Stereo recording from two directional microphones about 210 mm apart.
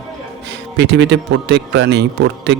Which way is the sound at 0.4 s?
55° right (ahead or behind).